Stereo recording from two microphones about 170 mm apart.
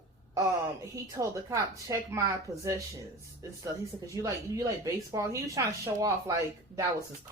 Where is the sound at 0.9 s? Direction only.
20° right (ahead or behind).